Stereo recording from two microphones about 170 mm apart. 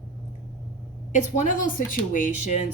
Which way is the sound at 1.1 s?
50° left (ahead or behind).